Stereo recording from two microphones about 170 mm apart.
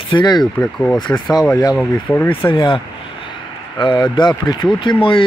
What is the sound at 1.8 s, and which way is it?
Speech, 10° left (ahead or behind).